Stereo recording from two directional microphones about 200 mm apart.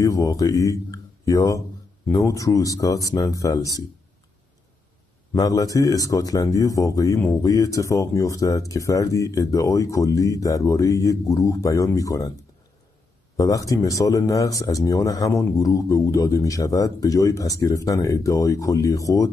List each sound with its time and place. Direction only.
0.0 s speech: 15° left (ahead or behind)
5.3 s speech: 15° left (ahead or behind)
13.4 s speech: 15° left (ahead or behind)